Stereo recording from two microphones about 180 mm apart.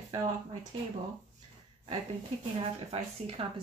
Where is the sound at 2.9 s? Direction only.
35° right (ahead or behind).